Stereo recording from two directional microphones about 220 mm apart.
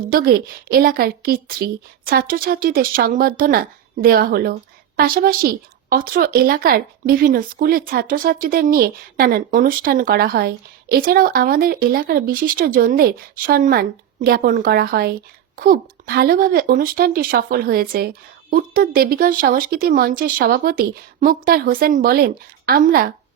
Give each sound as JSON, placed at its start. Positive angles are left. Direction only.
{"t": 0.1, "sound": "a woman's voice", "side_deg": -45}